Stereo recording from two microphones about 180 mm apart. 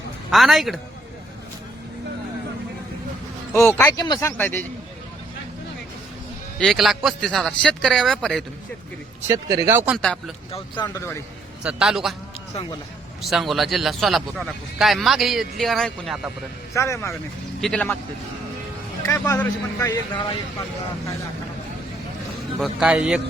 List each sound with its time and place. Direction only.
0.3 s speech: centre (ahead or behind)
3.5 s speech: 15° left (ahead or behind)
6.6 s speech: centre (ahead or behind)
9.5 s speech: 20° right (ahead or behind)
10.0 s speech: 5° left (ahead or behind)
11.6 s speech: 5° right (ahead or behind)
13.2 s speech: centre (ahead or behind)
16.7 s speech: 15° left (ahead or behind)
17.6 s speech: 5° left (ahead or behind)
19.0 s speech: 15° left (ahead or behind)
22.6 s speech: 5° right (ahead or behind)